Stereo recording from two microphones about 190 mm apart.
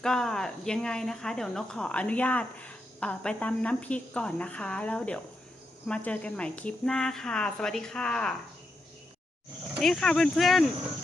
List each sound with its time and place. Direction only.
0.0 s speech: 5° left (ahead or behind)
9.7 s speech: centre (ahead or behind)